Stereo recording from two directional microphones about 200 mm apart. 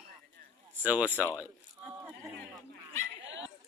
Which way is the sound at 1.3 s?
10° right (ahead or behind).